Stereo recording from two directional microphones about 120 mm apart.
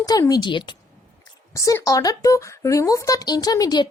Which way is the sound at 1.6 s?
25° left (ahead or behind).